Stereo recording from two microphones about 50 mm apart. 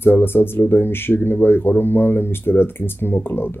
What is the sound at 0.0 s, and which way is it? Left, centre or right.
Speech, left.